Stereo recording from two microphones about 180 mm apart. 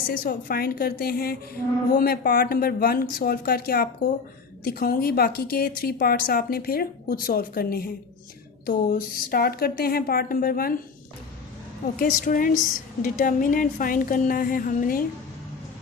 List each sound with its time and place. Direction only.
0.2 s a woman's voice: 55° left (ahead or behind)
11.9 s a woman's voice: 50° left (ahead or behind)